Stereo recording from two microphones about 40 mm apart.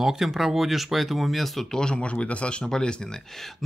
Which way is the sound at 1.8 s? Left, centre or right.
Left.